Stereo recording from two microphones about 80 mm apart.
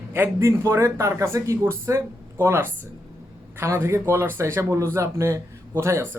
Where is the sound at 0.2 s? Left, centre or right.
Right.